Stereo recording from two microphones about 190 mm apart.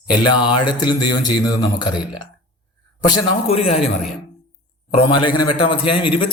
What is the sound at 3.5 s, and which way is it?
Speech, 30° left (ahead or behind).